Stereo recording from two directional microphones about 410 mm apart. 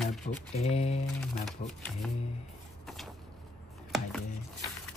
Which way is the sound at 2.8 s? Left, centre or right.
Centre.